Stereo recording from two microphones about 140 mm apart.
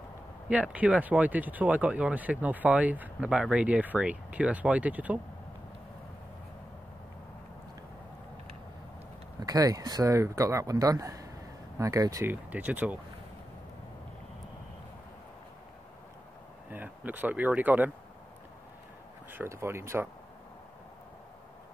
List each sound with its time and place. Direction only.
0.5 s speech: 10° right (ahead or behind)
9.4 s speech: 25° right (ahead or behind); by 13.0 s 10° right (ahead or behind)
16.7 s speech: 10° right (ahead or behind)
19.3 s speech: 20° right (ahead or behind)